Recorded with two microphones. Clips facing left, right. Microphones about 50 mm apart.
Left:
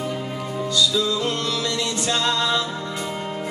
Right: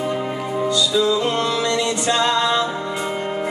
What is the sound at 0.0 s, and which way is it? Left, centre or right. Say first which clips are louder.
Music: right 5 dB; right.